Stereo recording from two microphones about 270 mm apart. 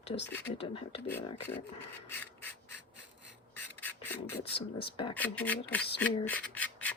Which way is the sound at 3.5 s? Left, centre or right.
Centre.